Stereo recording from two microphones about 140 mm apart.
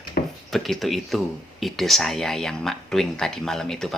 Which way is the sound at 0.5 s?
Centre (ahead or behind).